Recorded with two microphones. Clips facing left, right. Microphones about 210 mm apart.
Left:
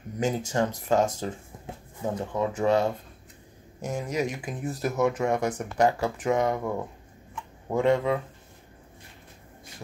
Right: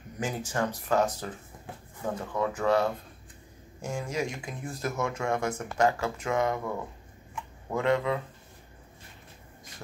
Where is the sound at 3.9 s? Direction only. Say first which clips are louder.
Left 3 dB; 20° left (ahead or behind).